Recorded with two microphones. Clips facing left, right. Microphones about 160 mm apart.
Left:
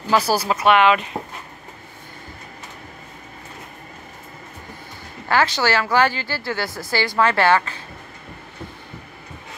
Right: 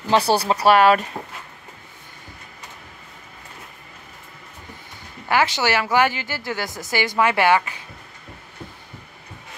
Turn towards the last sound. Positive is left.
turn(degrees=-15)  # may be behind; listen again after turning